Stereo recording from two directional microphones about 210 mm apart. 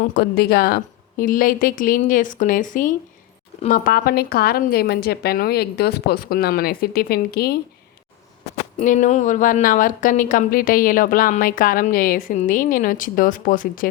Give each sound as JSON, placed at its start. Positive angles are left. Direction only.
{"t": 0.0, "sound": "speech", "side_deg": 45}
{"t": 8.8, "sound": "speech", "side_deg": 35}